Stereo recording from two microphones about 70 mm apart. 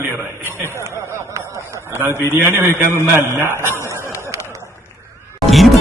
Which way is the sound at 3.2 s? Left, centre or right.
Right.